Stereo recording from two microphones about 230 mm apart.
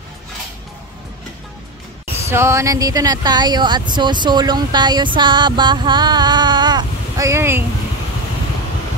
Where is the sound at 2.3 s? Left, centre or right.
Centre.